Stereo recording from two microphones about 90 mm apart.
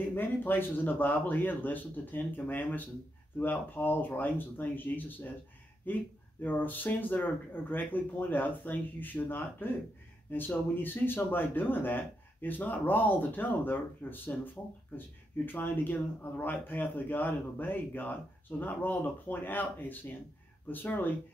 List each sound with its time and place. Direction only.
0.1 s a man's voice: 20° left (ahead or behind)